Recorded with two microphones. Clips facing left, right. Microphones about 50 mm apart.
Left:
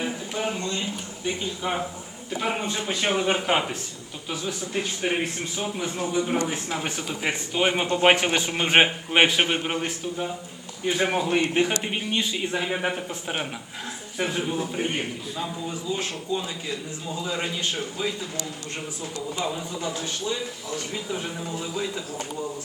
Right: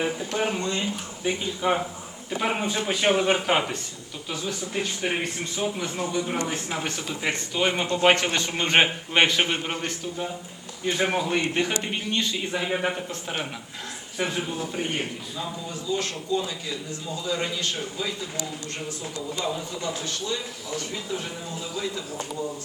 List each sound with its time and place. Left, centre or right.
0.0 s speech: centre
0.8 s a man's voice: centre
6.5 s speech: centre
6.8 s a man's voice: centre
14.8 s a man's voice: centre
19.5 s a man's voice: centre